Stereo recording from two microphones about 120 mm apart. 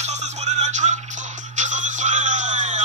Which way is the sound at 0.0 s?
70° right (ahead or behind).